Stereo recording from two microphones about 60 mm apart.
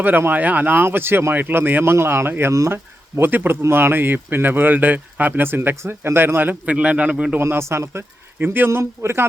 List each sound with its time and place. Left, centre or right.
0.0 s speech: right
6.7 s a man's voice: right
7.3 s a man's voice: right
8.4 s speech: right
8.8 s a man's voice: right